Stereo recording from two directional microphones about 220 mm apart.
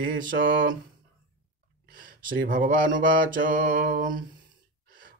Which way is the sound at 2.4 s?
40° right (ahead or behind).